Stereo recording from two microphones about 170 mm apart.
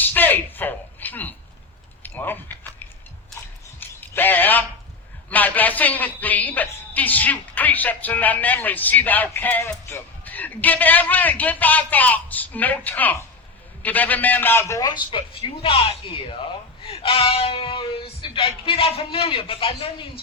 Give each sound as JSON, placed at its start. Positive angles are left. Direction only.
{"t": 0.0, "sound": "a man's voice", "side_deg": 10}
{"t": 2.0, "sound": "biting", "side_deg": 10}
{"t": 3.8, "sound": "a sound", "side_deg": 10}
{"t": 5.3, "sound": "a woman's voice", "side_deg": 10}